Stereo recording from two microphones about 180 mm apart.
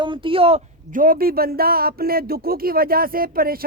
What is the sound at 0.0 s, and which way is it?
Speech, 30° right (ahead or behind).